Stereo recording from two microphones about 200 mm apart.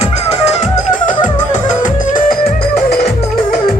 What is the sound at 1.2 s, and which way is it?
Music, 40° left (ahead or behind).